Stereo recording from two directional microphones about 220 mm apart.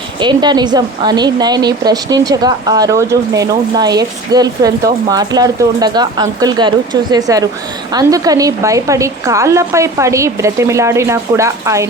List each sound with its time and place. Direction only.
0.2 s speech: 20° right (ahead or behind)